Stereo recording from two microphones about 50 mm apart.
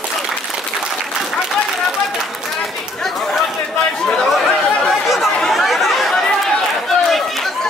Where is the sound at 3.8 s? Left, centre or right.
Centre.